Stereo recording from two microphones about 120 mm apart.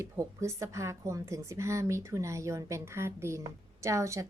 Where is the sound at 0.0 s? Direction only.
25° right (ahead or behind).